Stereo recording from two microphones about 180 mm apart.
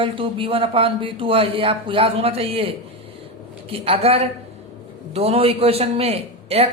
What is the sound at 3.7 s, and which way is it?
A woman's voice, 35° right (ahead or behind).